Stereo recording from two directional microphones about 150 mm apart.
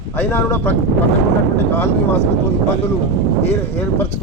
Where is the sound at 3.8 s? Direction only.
15° left (ahead or behind).